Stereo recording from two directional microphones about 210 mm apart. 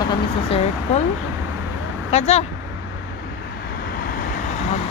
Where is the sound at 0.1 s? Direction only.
30° left (ahead or behind).